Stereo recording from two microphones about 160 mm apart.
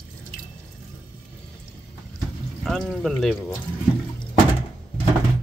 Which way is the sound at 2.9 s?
5° left (ahead or behind).